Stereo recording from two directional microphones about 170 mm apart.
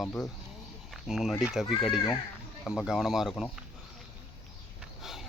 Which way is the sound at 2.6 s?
Centre (ahead or behind).